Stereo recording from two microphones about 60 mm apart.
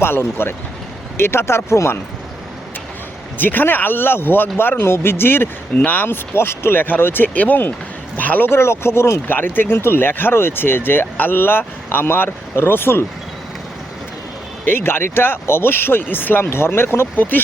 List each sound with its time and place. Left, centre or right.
0.0 s speech: left
3.3 s a man's voice: left
8.4 s speech: left
14.7 s speech: left
17.2 s speech: left